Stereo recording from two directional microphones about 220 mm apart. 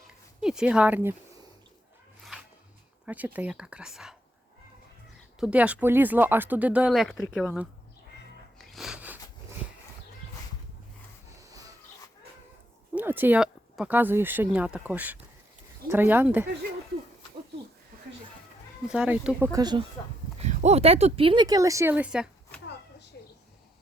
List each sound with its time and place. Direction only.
0.1 s a sound: 5° right (ahead or behind)
3.1 s speech: 5° right (ahead or behind)
5.4 s speech: 5° right (ahead or behind)
8.5 s snort: centre (ahead or behind)
11.3 s music: 15° right (ahead or behind)
13.0 s speech: 10° right (ahead or behind)
18.9 s speech: 5° right (ahead or behind)
20.4 s speech: 30° right (ahead or behind); by 22.6 s 5° right (ahead or behind)